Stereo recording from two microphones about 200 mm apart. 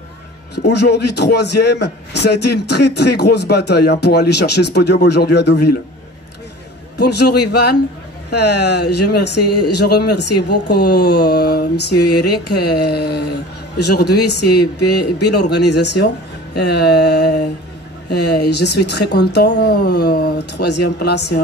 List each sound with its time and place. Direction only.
0.6 s a man's voice: 55° left (ahead or behind)
7.0 s a man's voice: 55° left (ahead or behind)